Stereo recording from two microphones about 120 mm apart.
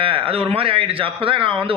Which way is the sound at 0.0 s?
50° right (ahead or behind).